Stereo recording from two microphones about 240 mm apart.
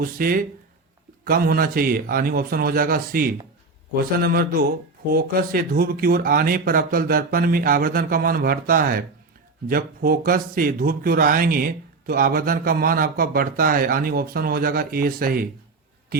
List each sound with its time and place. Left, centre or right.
0.0 s speech: right